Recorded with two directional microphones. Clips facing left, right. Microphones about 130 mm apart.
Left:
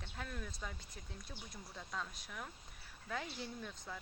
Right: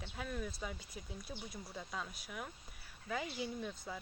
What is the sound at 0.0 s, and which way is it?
Speech, 5° right (ahead or behind).